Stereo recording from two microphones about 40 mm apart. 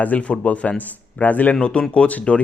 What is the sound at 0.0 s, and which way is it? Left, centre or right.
A man's voice, left.